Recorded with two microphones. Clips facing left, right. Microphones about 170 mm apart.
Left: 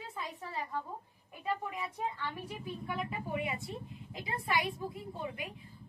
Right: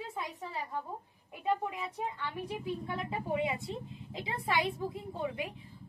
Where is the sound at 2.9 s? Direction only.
25° right (ahead or behind).